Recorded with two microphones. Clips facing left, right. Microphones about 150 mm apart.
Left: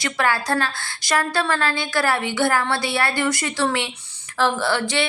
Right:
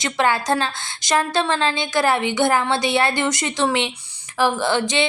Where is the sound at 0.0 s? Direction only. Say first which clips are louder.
Right 2 dB; 20° right (ahead or behind).